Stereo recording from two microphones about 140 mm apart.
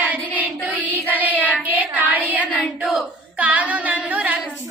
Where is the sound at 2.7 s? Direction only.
5° right (ahead or behind).